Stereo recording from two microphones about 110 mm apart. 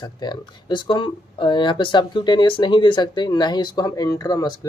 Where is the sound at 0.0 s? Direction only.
40° left (ahead or behind).